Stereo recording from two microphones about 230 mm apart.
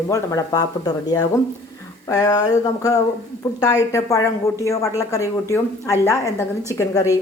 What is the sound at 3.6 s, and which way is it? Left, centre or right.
A woman's voice, centre.